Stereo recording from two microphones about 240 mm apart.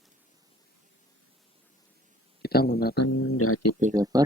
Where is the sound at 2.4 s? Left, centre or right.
Left.